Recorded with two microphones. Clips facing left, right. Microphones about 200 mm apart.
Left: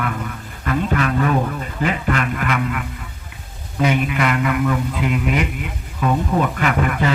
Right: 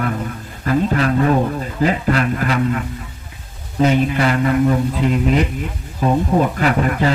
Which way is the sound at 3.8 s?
30° right (ahead or behind).